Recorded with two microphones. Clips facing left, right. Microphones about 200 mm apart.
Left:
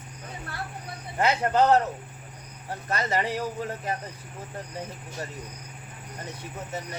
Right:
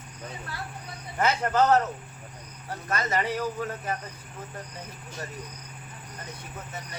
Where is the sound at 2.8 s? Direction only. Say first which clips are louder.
Left 1 dB; 30° left (ahead or behind).